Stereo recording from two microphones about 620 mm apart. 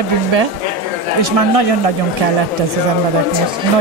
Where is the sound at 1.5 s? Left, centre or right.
Right.